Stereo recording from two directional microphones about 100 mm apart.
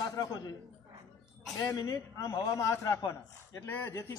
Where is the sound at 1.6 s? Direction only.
40° left (ahead or behind).